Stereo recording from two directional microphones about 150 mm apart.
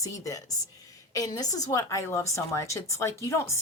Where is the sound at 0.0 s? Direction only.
20° left (ahead or behind).